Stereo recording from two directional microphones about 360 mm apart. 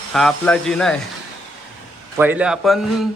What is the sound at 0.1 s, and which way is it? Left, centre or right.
Speech, centre.